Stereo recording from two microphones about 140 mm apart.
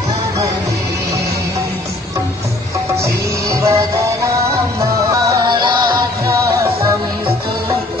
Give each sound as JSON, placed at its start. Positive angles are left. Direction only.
{"t": 3.4, "sound": "music", "side_deg": -20}
{"t": 6.6, "sound": "music", "side_deg": -20}